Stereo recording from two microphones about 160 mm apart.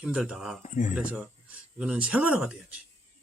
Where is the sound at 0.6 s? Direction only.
50° left (ahead or behind).